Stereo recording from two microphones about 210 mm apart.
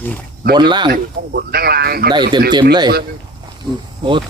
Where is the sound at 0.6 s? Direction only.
20° right (ahead or behind).